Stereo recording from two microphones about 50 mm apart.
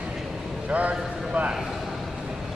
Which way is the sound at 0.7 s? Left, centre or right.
Right.